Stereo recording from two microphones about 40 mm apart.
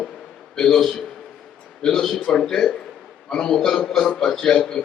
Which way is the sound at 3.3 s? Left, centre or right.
Centre.